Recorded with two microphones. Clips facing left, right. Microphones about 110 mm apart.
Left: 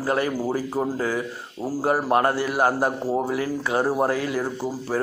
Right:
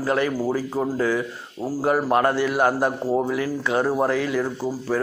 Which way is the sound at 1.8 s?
35° left (ahead or behind).